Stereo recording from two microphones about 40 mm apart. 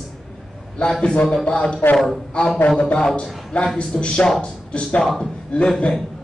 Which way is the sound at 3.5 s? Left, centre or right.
Left.